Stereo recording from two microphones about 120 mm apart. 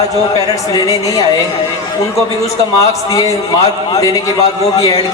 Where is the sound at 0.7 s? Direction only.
30° left (ahead or behind).